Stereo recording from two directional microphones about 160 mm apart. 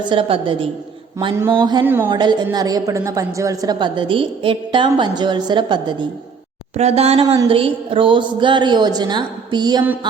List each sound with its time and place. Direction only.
0.0 s a woman's voice: 30° right (ahead or behind)
1.8 s a woman's voice: 15° right (ahead or behind)
2.0 s a woman's voice: 25° right (ahead or behind)
6.7 s a woman's voice: 40° right (ahead or behind)